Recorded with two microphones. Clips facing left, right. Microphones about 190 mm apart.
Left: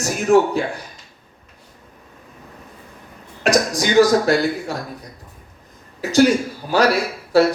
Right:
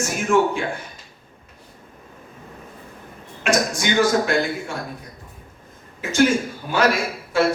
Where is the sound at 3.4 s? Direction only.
35° left (ahead or behind).